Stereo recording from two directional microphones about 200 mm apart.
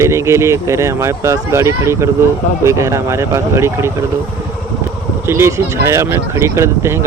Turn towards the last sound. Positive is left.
turn(degrees=-15)  # may be behind; listen again after turning